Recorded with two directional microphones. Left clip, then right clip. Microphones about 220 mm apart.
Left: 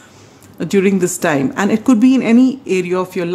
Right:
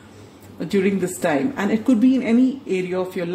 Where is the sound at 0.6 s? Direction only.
35° left (ahead or behind).